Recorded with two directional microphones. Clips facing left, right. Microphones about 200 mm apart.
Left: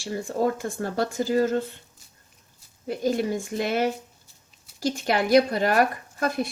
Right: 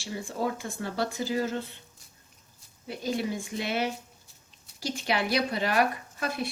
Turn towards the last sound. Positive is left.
turn(degrees=45)  # may be behind; listen again after turning